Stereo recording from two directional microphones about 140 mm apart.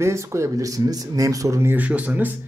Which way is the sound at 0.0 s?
20° right (ahead or behind).